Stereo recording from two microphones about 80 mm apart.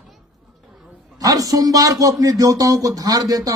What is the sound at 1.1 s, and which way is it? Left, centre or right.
A man's voice, right.